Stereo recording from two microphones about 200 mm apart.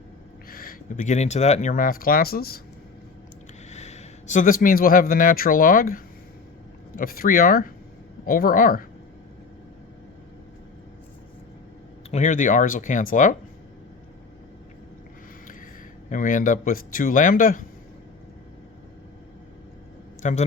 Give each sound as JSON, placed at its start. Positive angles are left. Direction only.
{"t": 0.5, "sound": "a sound", "side_deg": 45}
{"t": 0.9, "sound": "speech", "side_deg": 35}
{"t": 3.7, "sound": "speech", "side_deg": 35}
{"t": 12.1, "sound": "speech", "side_deg": 40}
{"t": 16.0, "sound": "speech", "side_deg": 40}
{"t": 20.2, "sound": "speech", "side_deg": 35}